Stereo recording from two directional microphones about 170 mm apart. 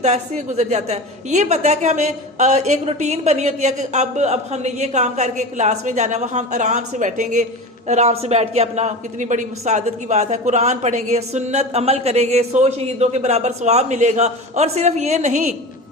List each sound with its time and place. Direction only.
0.0 s a woman's voice: 40° right (ahead or behind)